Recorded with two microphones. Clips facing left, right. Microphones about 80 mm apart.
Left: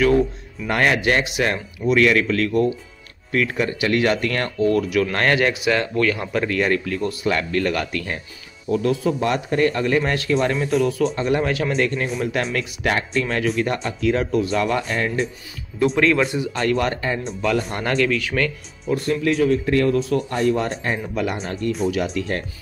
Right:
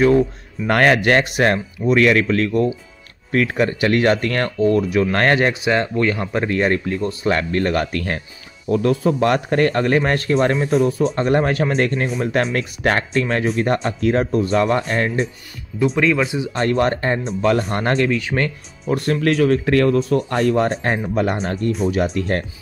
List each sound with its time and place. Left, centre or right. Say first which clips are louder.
0.7 s speech: right 4 dB; right
15.8 s speech: even; centre
16.5 s speech: right 4 dB; right
18.9 s speech: right 2 dB; right